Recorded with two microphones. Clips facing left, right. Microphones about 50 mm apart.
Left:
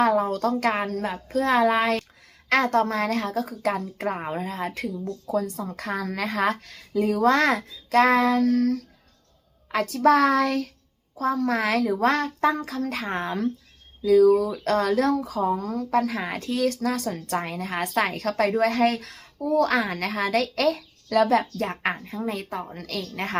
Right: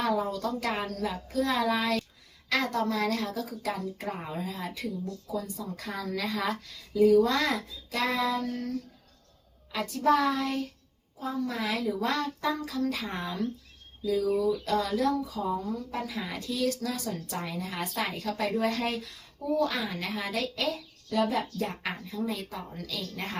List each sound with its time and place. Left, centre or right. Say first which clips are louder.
0.0 s a woman's voice: left 7 dB; left
9.7 s a woman's voice: left 6 dB; left